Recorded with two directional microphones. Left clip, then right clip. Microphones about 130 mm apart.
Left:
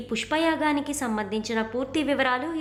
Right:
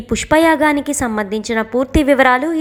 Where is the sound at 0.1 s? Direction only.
45° right (ahead or behind).